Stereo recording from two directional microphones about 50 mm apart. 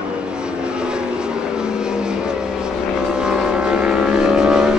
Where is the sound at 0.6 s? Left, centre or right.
Centre.